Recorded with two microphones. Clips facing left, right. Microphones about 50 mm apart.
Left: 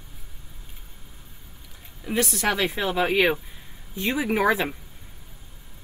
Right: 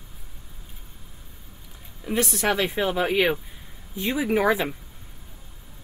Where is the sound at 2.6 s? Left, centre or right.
Centre.